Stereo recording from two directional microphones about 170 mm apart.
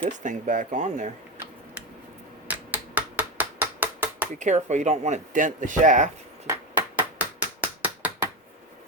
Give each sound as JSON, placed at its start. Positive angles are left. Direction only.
{"t": 0.2, "sound": "speech", "side_deg": -50}
{"t": 2.5, "sound": "hammer", "side_deg": -10}
{"t": 4.4, "sound": "speech", "side_deg": -45}
{"t": 6.5, "sound": "a sound", "side_deg": -10}